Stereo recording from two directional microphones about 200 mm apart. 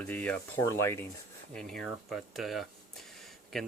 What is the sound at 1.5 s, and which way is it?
Speech, centre (ahead or behind).